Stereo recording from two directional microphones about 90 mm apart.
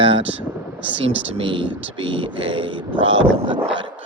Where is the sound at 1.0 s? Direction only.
90° right.